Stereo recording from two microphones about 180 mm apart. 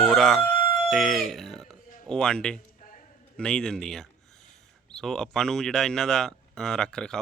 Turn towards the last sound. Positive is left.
turn(degrees=5)  # may be behind; listen again after turning